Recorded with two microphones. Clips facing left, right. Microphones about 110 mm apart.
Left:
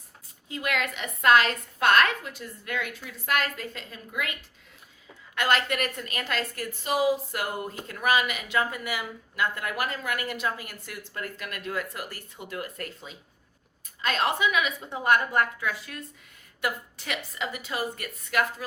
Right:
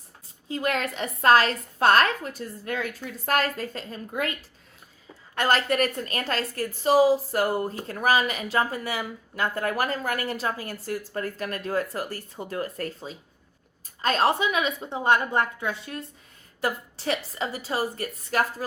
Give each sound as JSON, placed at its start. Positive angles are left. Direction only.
{"t": 0.4, "sound": "a woman's voice", "side_deg": -35}